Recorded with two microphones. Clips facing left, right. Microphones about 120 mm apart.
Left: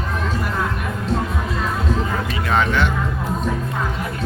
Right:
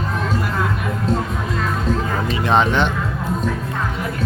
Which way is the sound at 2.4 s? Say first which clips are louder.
Right 3 dB; 25° right (ahead or behind).